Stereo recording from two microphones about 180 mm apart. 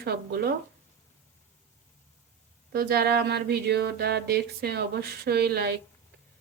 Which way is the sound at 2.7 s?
60° right (ahead or behind).